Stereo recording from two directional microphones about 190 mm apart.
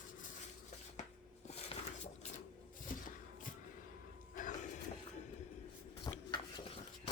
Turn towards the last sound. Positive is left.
turn(degrees=25)  # may be behind; listen again after turning